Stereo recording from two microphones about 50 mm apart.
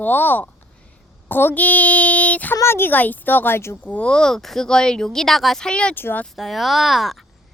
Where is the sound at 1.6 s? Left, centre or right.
Left.